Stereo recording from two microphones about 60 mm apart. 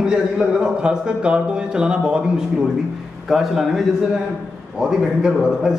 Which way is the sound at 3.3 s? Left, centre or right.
Centre.